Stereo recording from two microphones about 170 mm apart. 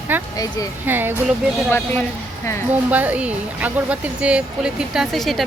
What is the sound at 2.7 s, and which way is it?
Speech, 10° right (ahead or behind).